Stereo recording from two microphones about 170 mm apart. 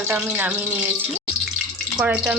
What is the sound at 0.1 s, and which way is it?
Speech, 10° right (ahead or behind).